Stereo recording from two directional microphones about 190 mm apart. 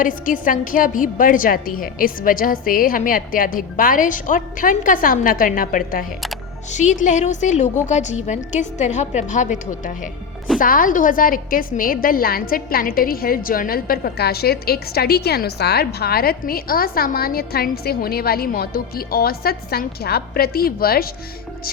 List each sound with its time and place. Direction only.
0.0 s a woman's voice: 45° left (ahead or behind)